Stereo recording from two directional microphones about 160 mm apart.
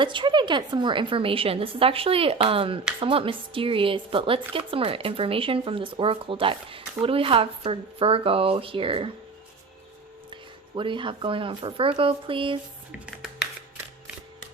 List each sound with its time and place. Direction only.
0.0 s a woman's voice: 30° right (ahead or behind)
10.8 s a woman's voice: 30° right (ahead or behind)